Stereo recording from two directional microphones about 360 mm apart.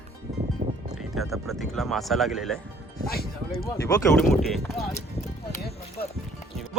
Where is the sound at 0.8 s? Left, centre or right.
Centre.